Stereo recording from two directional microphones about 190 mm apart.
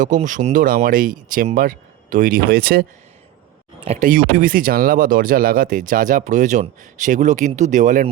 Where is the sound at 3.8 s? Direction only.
35° right (ahead or behind).